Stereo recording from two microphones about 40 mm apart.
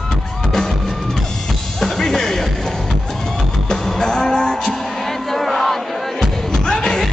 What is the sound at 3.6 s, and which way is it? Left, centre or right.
Music, centre.